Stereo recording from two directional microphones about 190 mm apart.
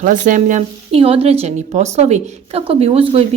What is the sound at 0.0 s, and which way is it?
Speech, 40° right (ahead or behind).